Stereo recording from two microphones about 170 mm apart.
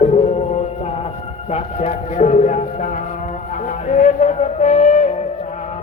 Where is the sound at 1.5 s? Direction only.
40° left (ahead or behind).